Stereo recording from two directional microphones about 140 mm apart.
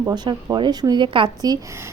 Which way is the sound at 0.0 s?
25° right (ahead or behind).